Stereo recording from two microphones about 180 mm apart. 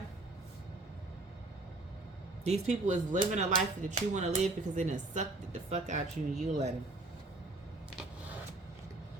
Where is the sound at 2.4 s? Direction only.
35° right (ahead or behind).